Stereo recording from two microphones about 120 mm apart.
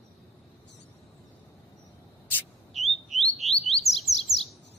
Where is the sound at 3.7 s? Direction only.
Centre (ahead or behind).